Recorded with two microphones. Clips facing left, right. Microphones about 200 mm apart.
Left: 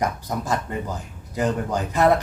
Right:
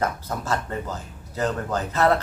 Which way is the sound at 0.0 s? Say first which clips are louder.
Left 1 dB; 15° left (ahead or behind).